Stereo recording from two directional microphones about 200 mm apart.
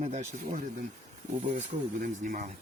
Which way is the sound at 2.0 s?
40° right (ahead or behind).